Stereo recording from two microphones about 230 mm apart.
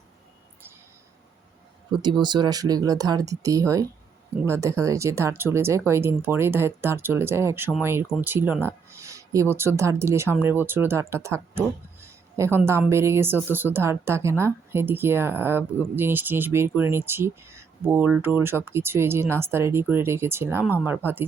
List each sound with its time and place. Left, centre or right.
2.2 s speech: centre